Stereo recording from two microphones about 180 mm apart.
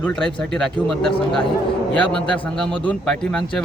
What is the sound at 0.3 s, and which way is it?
A man's voice, centre (ahead or behind).